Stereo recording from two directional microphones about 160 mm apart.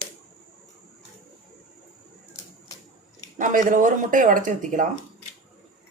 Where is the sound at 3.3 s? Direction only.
55° right (ahead or behind).